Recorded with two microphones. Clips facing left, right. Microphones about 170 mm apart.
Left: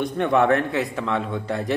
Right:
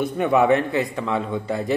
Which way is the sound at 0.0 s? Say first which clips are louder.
Right 1 dB; 5° right (ahead or behind).